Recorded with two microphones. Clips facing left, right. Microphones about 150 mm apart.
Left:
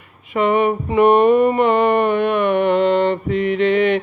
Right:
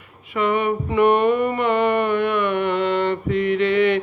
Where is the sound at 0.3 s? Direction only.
25° left (ahead or behind).